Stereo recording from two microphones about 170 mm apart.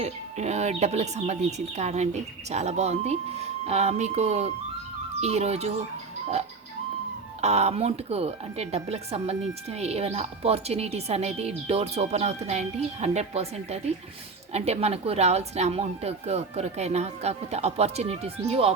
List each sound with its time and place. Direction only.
0.0 s speech: 40° right (ahead or behind)
7.4 s speech: 40° right (ahead or behind)